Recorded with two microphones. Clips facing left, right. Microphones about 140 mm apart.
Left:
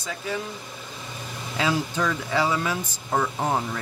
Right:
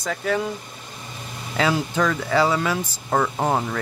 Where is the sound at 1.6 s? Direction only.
75° right (ahead or behind).